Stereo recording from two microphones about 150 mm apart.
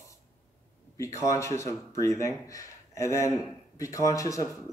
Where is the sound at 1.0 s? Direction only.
20° left (ahead or behind).